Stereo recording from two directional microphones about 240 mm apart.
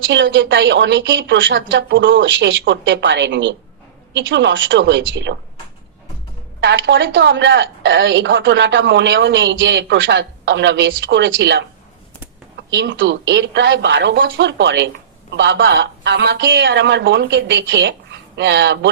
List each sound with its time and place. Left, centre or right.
0.0 s a woman's voice: right
6.6 s a woman's voice: right
12.7 s a woman's voice: right